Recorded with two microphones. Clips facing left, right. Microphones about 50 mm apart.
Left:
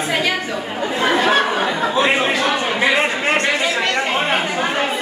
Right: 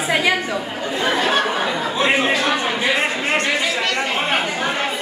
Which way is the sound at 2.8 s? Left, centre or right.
Left.